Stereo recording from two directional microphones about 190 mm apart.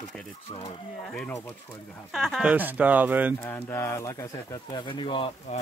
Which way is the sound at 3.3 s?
10° left (ahead or behind).